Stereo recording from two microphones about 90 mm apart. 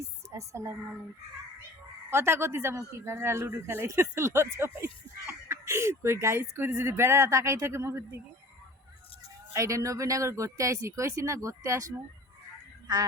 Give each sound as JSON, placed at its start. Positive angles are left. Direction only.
{"t": 0.0, "sound": "music", "side_deg": -35}
{"t": 2.0, "sound": "a man's voice", "side_deg": -25}
{"t": 9.5, "sound": "speech", "side_deg": -35}